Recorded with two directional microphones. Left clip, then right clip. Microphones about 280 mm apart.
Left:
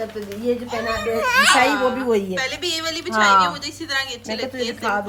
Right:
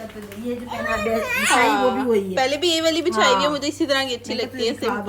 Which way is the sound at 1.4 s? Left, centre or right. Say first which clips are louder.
Left 1 dB; centre.